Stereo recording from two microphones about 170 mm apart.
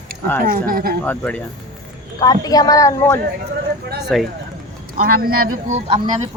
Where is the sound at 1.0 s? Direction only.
10° left (ahead or behind).